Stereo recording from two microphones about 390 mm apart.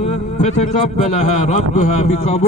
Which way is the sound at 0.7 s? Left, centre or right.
Centre.